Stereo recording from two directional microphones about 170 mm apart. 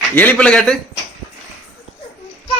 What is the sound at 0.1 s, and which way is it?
Speech, 10° left (ahead or behind).